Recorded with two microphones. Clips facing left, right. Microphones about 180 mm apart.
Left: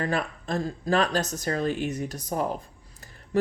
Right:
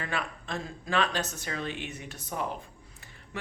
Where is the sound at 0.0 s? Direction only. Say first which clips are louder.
Left 7 dB; 40° left (ahead or behind).